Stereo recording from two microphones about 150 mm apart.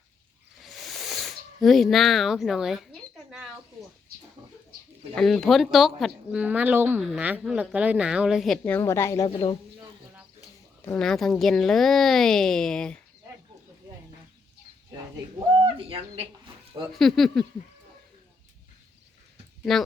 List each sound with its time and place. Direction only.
0.6 s a sound: centre (ahead or behind)
3.2 s bird: 5° right (ahead or behind)
5.1 s a woman's voice: 5° left (ahead or behind)
8.6 s a woman's voice: 15° left (ahead or behind)
9.3 s speech: 35° left (ahead or behind)
10.8 s speech: 5° left (ahead or behind)
14.8 s speech: 25° right (ahead or behind)
16.9 s speech: centre (ahead or behind)
19.7 s speech: centre (ahead or behind)